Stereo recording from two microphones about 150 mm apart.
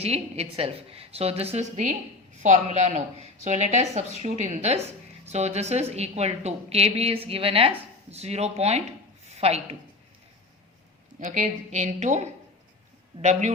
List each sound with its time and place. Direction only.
0.0 s a woman's voice: 45° right (ahead or behind)
11.2 s a woman's voice: 55° right (ahead or behind)